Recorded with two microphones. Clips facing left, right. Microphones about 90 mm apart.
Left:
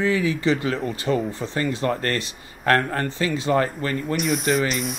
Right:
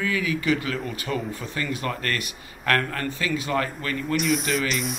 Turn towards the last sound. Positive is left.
turn(degrees=0)  # may be behind; listen again after turning